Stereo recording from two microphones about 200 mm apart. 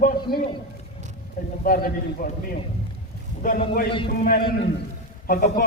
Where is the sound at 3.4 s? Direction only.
45° left (ahead or behind).